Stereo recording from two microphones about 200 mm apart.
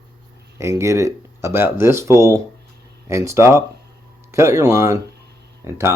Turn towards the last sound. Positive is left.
turn(degrees=-10)  # may be behind; listen again after turning